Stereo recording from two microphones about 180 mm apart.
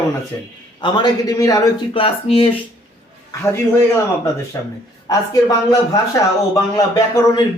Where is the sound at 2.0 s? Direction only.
30° left (ahead or behind).